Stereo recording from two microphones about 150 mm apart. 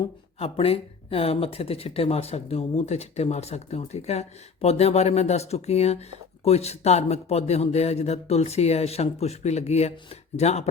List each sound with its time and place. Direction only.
0.0 s speech: 40° left (ahead or behind)